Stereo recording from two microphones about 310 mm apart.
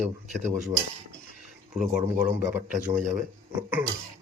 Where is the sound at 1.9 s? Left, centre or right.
Right.